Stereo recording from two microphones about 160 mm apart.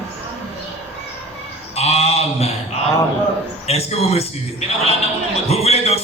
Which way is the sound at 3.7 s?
40° left (ahead or behind).